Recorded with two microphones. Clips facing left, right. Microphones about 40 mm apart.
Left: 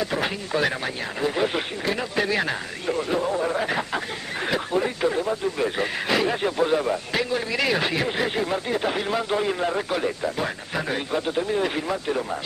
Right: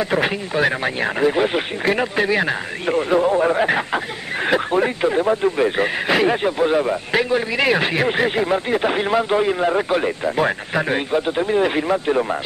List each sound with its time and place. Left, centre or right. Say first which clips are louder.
0.0 s speech: right 6 dB; right
1.3 s a man's voice: right 5 dB; right
2.9 s a man's voice: right 7 dB; right